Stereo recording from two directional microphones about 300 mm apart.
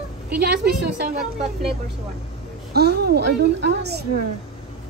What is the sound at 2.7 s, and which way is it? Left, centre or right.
A woman's voice, right.